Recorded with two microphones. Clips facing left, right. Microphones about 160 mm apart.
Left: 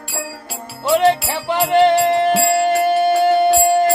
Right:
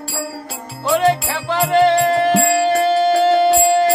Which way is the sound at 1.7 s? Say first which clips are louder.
Even; 20° left (ahead or behind).